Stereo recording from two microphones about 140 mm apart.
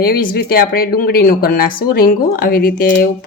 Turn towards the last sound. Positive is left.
turn(degrees=90)